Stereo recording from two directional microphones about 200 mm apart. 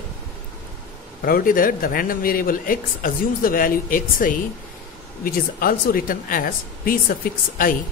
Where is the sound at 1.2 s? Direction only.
45° left (ahead or behind).